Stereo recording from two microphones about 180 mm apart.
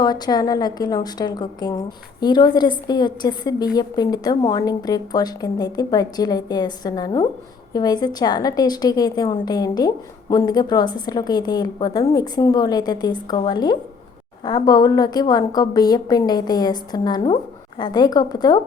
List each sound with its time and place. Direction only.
0.0 s a woman's voice: 20° left (ahead or behind)